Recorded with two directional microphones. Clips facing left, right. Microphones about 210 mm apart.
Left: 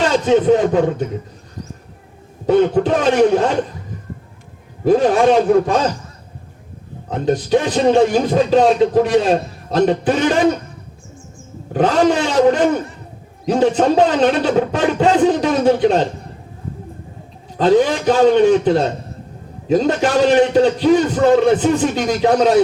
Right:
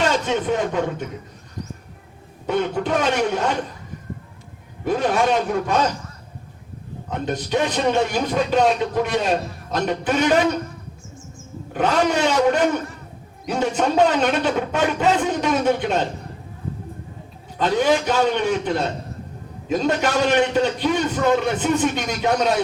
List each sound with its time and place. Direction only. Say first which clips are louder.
0.1 s speech: left 9 dB; 35° left (ahead or behind)
2.5 s speech: left 8 dB; 35° left (ahead or behind)
4.8 s speech: left 7 dB; 35° left (ahead or behind)
7.1 s speech: left 8 dB; 35° left (ahead or behind)
11.7 s speech: left 5 dB; 35° left (ahead or behind)
17.6 s speech: left 5 dB; 35° left (ahead or behind)